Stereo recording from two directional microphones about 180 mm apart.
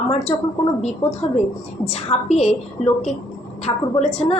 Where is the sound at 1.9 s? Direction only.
40° left (ahead or behind).